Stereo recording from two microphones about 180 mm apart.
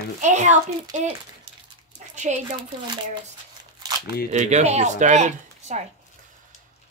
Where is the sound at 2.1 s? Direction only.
40° right (ahead or behind).